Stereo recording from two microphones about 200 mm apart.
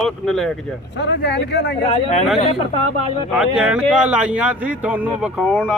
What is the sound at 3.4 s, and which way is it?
Speech, 5° right (ahead or behind).